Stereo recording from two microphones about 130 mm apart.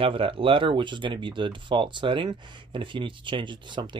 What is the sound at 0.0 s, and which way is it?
Speech, 45° right (ahead or behind).